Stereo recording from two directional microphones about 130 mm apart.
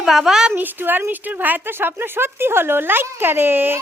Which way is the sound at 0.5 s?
15° right (ahead or behind).